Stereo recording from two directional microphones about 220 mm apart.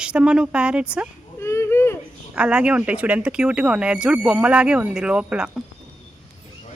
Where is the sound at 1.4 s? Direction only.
10° left (ahead or behind).